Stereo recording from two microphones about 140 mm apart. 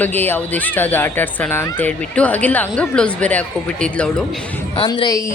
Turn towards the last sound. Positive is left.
turn(degrees=25)  # may be behind; listen again after turning